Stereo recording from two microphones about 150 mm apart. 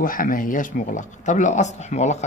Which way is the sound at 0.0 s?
70° left (ahead or behind).